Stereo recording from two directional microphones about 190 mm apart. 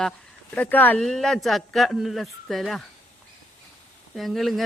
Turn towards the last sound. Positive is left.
turn(degrees=0)  # may be behind; listen again after turning